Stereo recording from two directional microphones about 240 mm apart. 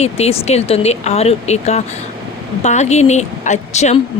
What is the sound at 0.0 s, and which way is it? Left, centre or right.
A woman's voice, left.